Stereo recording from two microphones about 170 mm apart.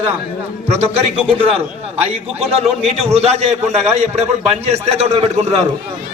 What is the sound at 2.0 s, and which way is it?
A man's voice, 40° right (ahead or behind).